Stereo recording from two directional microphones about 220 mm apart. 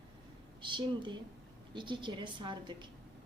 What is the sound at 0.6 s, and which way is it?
A woman's voice, 20° right (ahead or behind).